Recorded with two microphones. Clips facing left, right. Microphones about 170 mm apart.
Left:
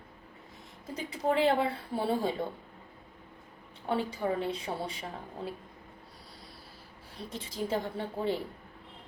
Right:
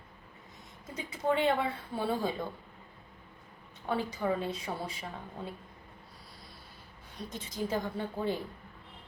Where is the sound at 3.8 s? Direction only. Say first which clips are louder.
Left 1 dB; 30° left (ahead or behind).